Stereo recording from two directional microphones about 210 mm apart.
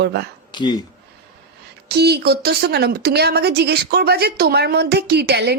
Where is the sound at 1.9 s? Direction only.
50° right (ahead or behind).